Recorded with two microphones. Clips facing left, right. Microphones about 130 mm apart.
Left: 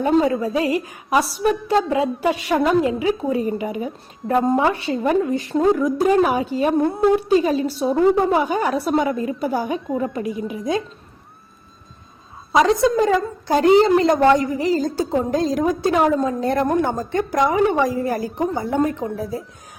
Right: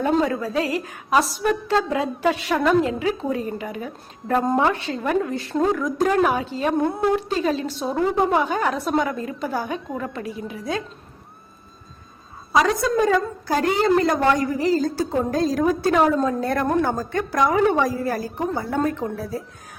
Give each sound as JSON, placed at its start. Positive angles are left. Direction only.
{"t": 0.0, "sound": "a woman's voice", "side_deg": 15}
{"t": 12.5, "sound": "a woman's voice", "side_deg": 25}